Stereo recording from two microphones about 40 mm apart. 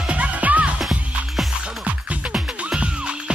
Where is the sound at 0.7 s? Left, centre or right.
Centre.